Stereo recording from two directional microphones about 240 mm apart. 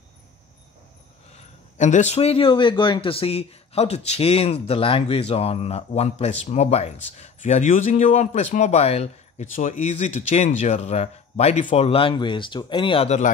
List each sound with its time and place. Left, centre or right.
1.3 s a man's voice: left